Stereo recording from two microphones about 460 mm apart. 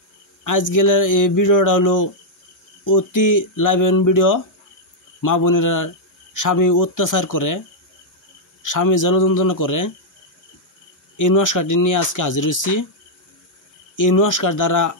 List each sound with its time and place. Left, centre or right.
0.4 s speech: left
8.6 s speech: left
11.1 s speech: left
13.9 s speech: left